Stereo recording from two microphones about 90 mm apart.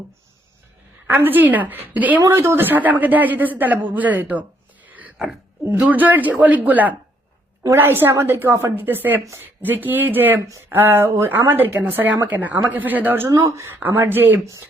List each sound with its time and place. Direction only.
1.0 s speech: 20° right (ahead or behind)
2.2 s speech: 30° right (ahead or behind)
4.9 s a sound: 15° right (ahead or behind)
5.7 s speech: 15° right (ahead or behind)
13.2 s speech: 35° right (ahead or behind)